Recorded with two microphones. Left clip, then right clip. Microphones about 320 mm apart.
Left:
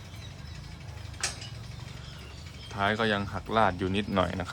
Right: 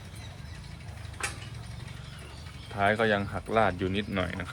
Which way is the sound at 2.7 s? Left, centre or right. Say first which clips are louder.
Right 2 dB; centre.